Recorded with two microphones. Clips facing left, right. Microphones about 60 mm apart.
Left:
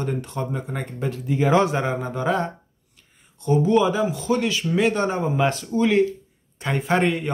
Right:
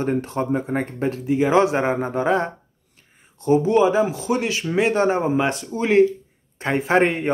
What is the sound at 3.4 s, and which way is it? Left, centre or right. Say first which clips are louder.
Speech: right 2 dB; centre.